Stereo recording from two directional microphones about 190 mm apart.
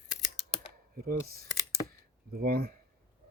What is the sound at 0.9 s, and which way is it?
Speech, 50° right (ahead or behind).